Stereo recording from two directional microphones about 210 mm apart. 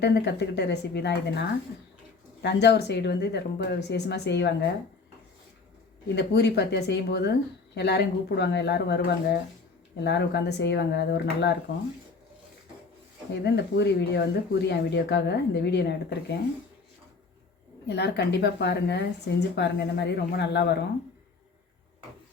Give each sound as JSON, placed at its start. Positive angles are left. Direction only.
{"t": 0.0, "sound": "speech", "side_deg": 55}
{"t": 2.4, "sound": "speech", "side_deg": 55}
{"t": 6.1, "sound": "speech", "side_deg": 55}
{"t": 13.3, "sound": "speech", "side_deg": 55}
{"t": 17.8, "sound": "speech", "side_deg": 55}